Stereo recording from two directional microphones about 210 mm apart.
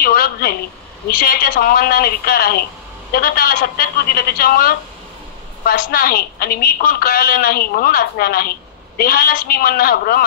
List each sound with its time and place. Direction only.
0.0 s a woman's voice: 45° left (ahead or behind)